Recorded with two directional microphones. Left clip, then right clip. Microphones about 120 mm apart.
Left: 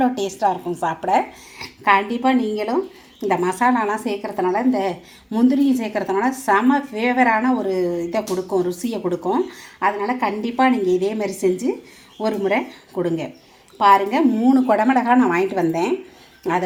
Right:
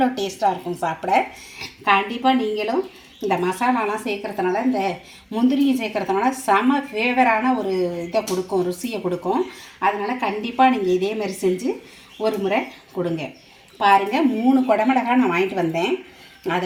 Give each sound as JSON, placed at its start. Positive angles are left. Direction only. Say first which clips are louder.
{"t": 0.0, "sound": "speech", "louder": "left 1 dB", "side_deg": 5}
{"t": 1.9, "sound": "a woman's voice", "louder": "left 1 dB", "side_deg": 20}